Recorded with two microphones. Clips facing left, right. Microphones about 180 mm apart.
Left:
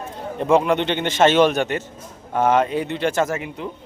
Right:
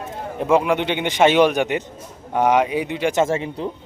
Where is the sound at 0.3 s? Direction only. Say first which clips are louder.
Left 1 dB; 5° right (ahead or behind).